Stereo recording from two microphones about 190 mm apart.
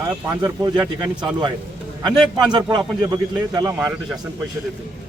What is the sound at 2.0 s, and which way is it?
A man's voice, 20° right (ahead or behind).